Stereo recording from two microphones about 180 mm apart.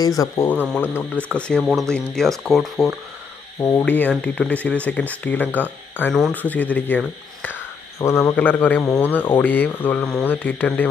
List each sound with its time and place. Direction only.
0.0 s speech: 20° left (ahead or behind); by 3.0 s centre (ahead or behind)
3.5 s speech: 15° left (ahead or behind)